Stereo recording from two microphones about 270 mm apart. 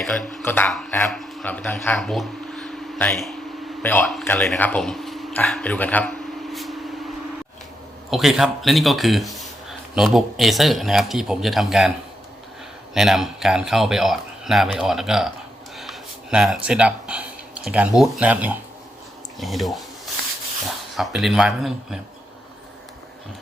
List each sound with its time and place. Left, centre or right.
0.0 s a man's voice: centre
8.1 s speech: centre
12.9 s speech: centre
20.2 s a sound: right
20.9 s speech: centre